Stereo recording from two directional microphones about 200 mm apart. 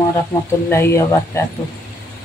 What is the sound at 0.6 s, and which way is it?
Speech, 10° left (ahead or behind).